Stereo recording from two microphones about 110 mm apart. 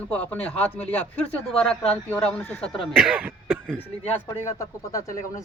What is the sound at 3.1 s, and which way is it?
Throat clearing, 15° right (ahead or behind).